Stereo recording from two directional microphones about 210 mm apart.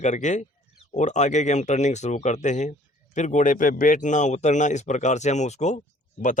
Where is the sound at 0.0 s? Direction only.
35° left (ahead or behind).